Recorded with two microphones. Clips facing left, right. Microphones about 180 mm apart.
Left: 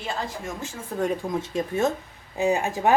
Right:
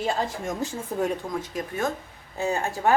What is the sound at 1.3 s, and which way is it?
A woman's voice, 25° left (ahead or behind).